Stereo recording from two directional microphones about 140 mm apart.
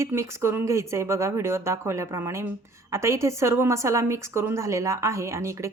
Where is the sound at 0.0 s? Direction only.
20° right (ahead or behind).